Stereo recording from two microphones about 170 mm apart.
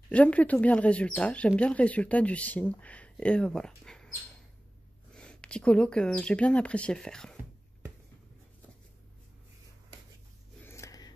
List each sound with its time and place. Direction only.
0.1 s speech: 10° left (ahead or behind)
5.1 s speech: 5° left (ahead or behind)
10.6 s a sound: 15° left (ahead or behind)